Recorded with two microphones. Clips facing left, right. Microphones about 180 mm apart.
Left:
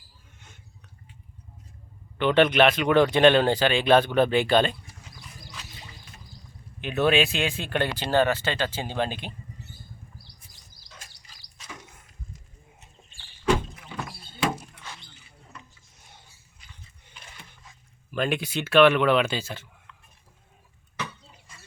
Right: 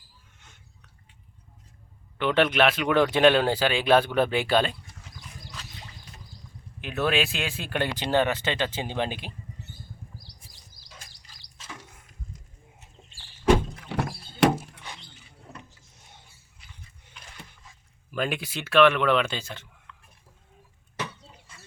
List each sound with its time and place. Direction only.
2.1 s speech: 5° right (ahead or behind)
5.5 s music: 5° left (ahead or behind)
6.8 s speech: centre (ahead or behind); by 9.2 s 15° right (ahead or behind)
13.8 s thunk: 70° right (ahead or behind)
18.1 s speech: 5° right (ahead or behind)